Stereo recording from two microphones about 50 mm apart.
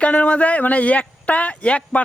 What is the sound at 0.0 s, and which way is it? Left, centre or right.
Speech, left.